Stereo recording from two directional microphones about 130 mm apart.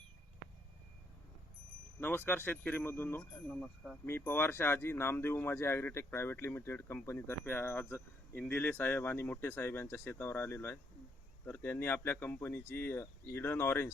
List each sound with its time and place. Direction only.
2.0 s speech: 15° left (ahead or behind)
3.5 s speech: 5° left (ahead or behind)
4.0 s speech: 15° left (ahead or behind)